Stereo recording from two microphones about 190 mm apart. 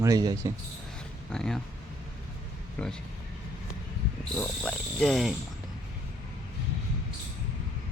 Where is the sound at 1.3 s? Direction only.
5° left (ahead or behind).